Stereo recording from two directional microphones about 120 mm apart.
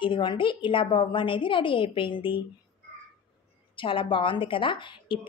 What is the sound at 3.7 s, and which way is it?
Speech, 45° left (ahead or behind).